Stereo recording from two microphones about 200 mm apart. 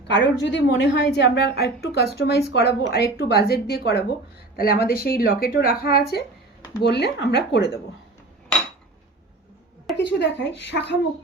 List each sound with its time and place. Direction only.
0.1 s a woman's voice: 60° left (ahead or behind)
9.9 s a woman's voice: 60° left (ahead or behind)